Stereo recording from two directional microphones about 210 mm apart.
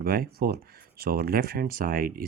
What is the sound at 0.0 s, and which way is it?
Speech, 45° right (ahead or behind).